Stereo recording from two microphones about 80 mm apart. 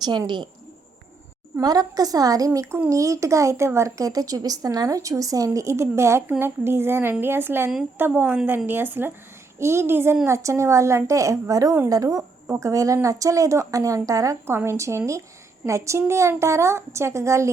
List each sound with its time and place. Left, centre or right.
1.6 s a woman's voice: right
14.4 s a woman's voice: right